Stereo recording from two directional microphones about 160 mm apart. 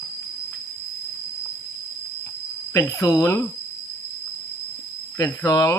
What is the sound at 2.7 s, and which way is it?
Speech, 20° left (ahead or behind).